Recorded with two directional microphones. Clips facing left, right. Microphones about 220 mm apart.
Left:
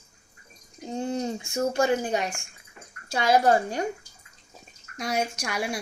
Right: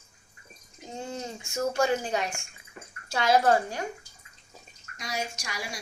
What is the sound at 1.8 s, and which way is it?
A child's voice, 20° left (ahead or behind).